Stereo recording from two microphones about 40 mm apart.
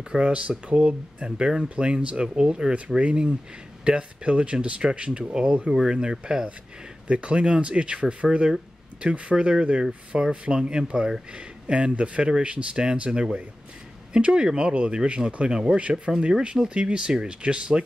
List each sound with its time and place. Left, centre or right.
0.3 s speech: right
16.1 s speech: centre
16.5 s speech: right